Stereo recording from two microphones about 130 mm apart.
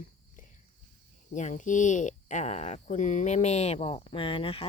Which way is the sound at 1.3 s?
70° left (ahead or behind).